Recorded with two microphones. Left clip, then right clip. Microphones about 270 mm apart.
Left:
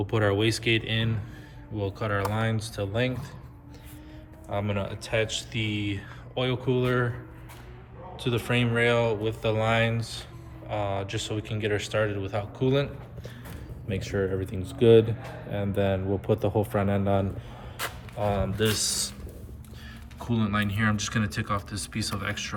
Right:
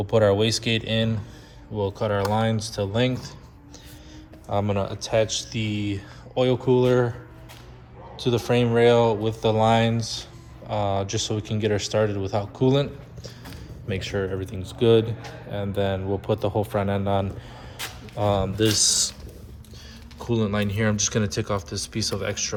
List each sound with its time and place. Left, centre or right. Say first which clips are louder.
0.1 s a man's voice: right 7 dB; centre
4.5 s speech: right 5 dB; centre
8.2 s a man's voice: right 5 dB; centre
18.3 s speech: right 5 dB; centre
20.1 s speech: right 3 dB; centre